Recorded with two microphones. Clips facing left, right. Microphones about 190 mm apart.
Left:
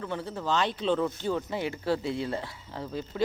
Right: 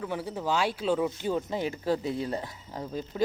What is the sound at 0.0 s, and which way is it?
Speech, 10° right (ahead or behind).